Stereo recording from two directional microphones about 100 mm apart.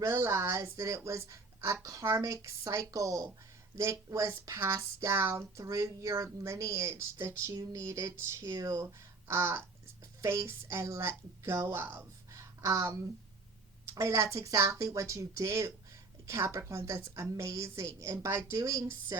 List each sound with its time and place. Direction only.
0.0 s a woman's voice: 25° right (ahead or behind)